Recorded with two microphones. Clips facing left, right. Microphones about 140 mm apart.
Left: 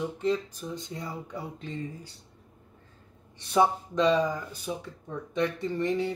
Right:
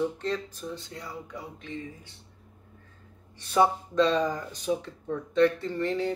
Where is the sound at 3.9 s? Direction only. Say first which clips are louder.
Even; 10° left (ahead or behind).